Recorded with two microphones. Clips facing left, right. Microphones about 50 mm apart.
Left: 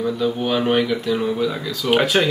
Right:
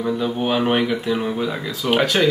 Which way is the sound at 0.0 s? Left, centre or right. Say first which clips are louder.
Even; right.